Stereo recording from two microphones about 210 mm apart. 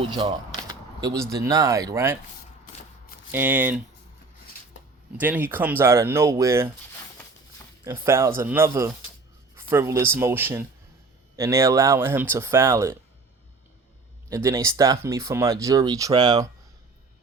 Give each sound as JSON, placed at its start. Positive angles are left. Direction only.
{"t": 0.1, "sound": "a sound", "side_deg": -20}
{"t": 1.5, "sound": "speech", "side_deg": -15}
{"t": 3.3, "sound": "speech", "side_deg": -10}
{"t": 5.1, "sound": "speech", "side_deg": -10}
{"t": 7.9, "sound": "speech", "side_deg": -10}
{"t": 14.3, "sound": "speech", "side_deg": -15}